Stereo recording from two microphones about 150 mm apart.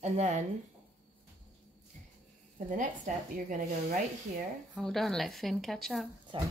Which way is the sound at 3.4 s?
60° right (ahead or behind).